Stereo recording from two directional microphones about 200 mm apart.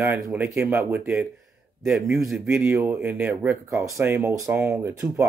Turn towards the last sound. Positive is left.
turn(degrees=-10)  # may be behind; listen again after turning